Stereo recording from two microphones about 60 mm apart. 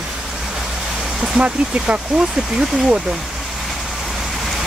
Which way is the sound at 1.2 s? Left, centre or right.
Centre.